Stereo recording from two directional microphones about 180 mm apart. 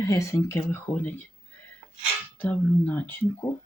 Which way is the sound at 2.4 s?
10° left (ahead or behind).